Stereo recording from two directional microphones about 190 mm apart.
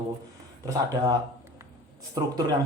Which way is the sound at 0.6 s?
20° right (ahead or behind).